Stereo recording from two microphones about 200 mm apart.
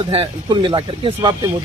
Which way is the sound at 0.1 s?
25° right (ahead or behind).